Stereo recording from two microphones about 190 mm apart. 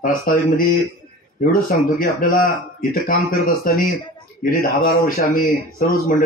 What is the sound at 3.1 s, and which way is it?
A man's voice, 50° left (ahead or behind).